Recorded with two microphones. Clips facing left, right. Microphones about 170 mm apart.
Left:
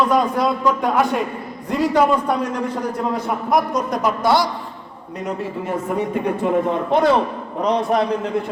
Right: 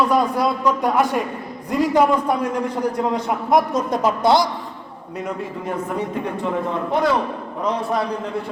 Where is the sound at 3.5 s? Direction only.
25° right (ahead or behind).